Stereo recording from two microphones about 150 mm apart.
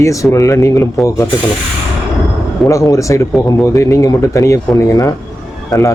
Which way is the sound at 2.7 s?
20° left (ahead or behind).